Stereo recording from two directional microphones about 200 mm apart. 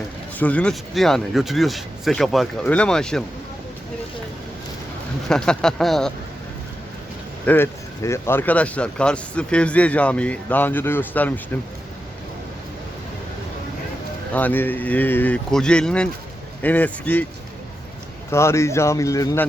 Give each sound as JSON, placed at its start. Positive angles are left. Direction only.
{"t": 0.3, "sound": "speech", "side_deg": 5}
{"t": 5.3, "sound": "speech", "side_deg": 5}
{"t": 7.4, "sound": "speech", "side_deg": 10}
{"t": 14.3, "sound": "speech", "side_deg": 10}
{"t": 18.3, "sound": "speech", "side_deg": 15}